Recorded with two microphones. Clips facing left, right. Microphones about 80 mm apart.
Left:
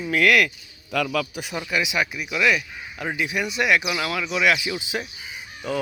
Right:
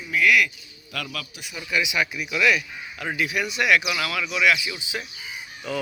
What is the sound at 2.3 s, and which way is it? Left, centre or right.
Speech, centre.